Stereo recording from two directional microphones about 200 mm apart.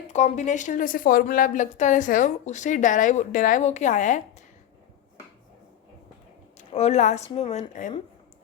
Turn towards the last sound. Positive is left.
turn(degrees=35)  # may be behind; listen again after turning